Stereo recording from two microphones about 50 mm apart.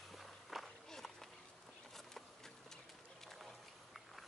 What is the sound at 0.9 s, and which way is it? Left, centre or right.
Horse, centre.